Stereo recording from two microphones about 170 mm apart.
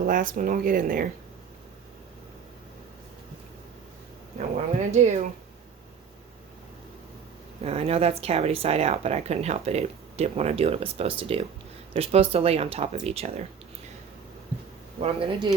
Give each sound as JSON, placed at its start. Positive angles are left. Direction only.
{"t": 0.0, "sound": "speech", "side_deg": -50}
{"t": 4.4, "sound": "speech", "side_deg": -40}
{"t": 7.6, "sound": "speech", "side_deg": -35}
{"t": 15.0, "sound": "speech", "side_deg": -30}